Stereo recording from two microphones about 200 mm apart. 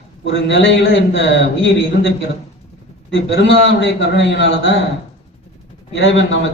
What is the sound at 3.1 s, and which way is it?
A man's voice, 60° left (ahead or behind).